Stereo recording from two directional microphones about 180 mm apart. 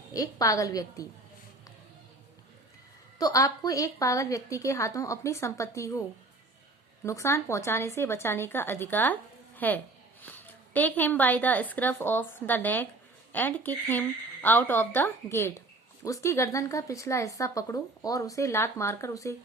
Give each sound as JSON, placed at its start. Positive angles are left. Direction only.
{"t": 0.1, "sound": "a woman's voice", "side_deg": 20}
{"t": 3.2, "sound": "speech", "side_deg": 20}
{"t": 7.0, "sound": "a woman's voice", "side_deg": 15}